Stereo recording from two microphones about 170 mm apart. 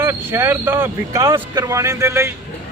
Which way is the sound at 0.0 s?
15° right (ahead or behind).